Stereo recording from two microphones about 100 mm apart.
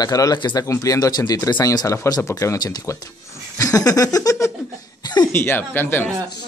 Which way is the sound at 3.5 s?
35° left (ahead or behind).